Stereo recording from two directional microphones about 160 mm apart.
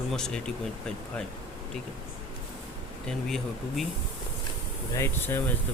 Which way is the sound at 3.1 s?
5° left (ahead or behind).